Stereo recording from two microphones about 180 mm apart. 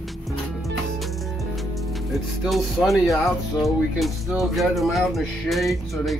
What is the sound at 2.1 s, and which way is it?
Speech, centre (ahead or behind).